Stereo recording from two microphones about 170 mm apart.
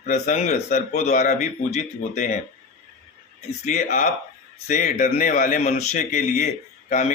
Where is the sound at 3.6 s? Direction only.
45° left (ahead or behind).